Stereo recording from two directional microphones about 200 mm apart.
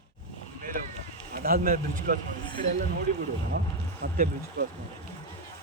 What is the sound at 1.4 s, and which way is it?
Speech, 45° right (ahead or behind).